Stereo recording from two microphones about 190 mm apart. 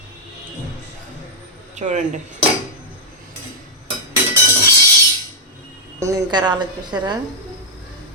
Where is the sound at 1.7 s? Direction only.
40° right (ahead or behind).